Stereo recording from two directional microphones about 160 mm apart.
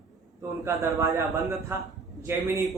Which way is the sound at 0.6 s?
15° right (ahead or behind).